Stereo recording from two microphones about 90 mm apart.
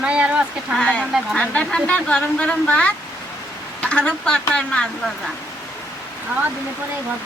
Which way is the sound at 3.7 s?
10° left (ahead or behind).